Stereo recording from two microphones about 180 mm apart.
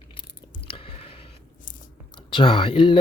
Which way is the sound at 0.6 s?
30° left (ahead or behind).